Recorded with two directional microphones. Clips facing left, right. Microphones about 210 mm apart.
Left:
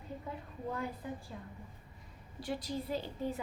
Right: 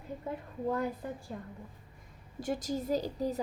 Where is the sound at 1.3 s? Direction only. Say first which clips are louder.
Right 5 dB; 50° right (ahead or behind).